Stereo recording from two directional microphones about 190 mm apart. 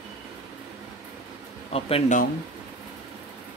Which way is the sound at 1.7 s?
30° left (ahead or behind).